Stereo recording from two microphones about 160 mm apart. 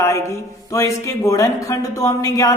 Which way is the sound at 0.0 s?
20° left (ahead or behind).